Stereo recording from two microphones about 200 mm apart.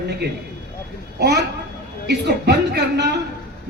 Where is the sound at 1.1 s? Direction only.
55° right (ahead or behind).